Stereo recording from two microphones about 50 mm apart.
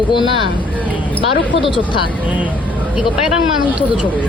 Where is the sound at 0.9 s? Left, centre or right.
Left.